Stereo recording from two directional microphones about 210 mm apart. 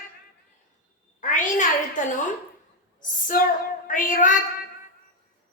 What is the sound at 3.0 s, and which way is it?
A woman's voice, 40° left (ahead or behind).